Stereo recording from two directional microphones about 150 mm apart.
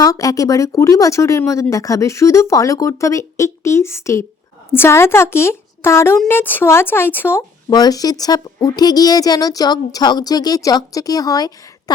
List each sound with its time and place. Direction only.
0.0 s a woman's voice: 25° left (ahead or behind)
7.7 s a woman's voice: 25° left (ahead or behind)